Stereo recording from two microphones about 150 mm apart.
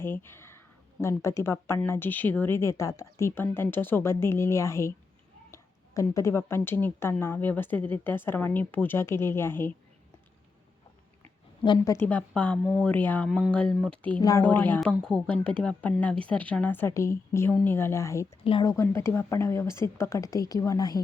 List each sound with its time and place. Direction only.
0.0 s a woman's voice: 15° left (ahead or behind)
11.6 s a woman's voice: 30° left (ahead or behind)
11.9 s a woman's voice: 10° left (ahead or behind)
14.2 s a woman's voice: 20° left (ahead or behind)
14.8 s a woman's voice: centre (ahead or behind); by 21.0 s 25° left (ahead or behind)